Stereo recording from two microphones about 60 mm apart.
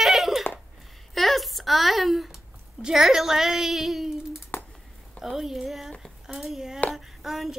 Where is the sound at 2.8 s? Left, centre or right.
Centre.